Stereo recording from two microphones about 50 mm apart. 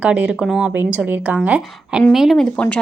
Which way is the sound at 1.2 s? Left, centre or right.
Right.